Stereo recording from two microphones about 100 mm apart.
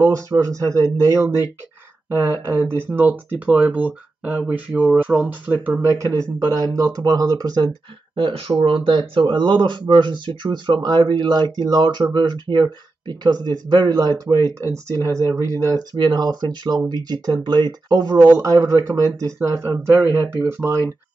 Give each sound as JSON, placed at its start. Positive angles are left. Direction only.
{"t": 0.0, "sound": "speech", "side_deg": -30}
{"t": 8.2, "sound": "speech", "side_deg": -60}